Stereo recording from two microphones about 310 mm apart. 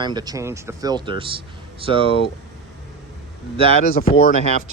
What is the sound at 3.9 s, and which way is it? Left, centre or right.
Speech, centre.